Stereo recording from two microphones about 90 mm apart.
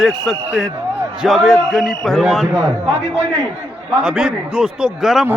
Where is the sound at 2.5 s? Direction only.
40° right (ahead or behind).